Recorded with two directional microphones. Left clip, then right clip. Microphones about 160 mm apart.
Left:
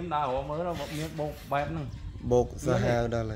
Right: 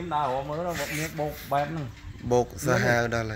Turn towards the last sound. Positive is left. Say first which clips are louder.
# right 4 dB
turn(degrees=10)  # may be behind; listen again after turning